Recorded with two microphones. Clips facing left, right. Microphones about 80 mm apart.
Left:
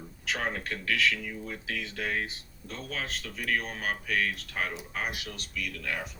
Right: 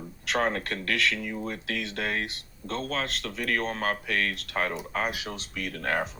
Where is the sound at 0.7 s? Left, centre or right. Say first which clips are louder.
Right 1 dB; right.